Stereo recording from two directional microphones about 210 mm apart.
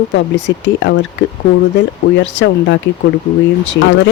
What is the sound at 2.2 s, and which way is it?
Speech, 60° left (ahead or behind).